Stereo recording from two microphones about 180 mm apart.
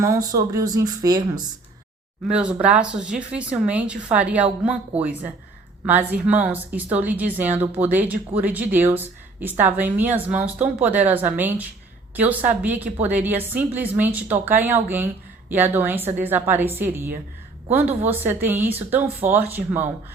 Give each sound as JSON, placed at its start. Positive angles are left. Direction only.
{"t": 0.0, "sound": "speech", "side_deg": -20}
{"t": 2.2, "sound": "a woman's voice", "side_deg": -5}